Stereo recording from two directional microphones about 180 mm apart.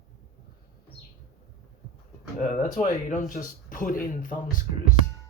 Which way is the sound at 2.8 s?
45° left (ahead or behind).